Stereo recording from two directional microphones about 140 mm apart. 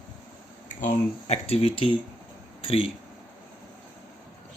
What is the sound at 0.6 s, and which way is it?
Speech, 65° left (ahead or behind).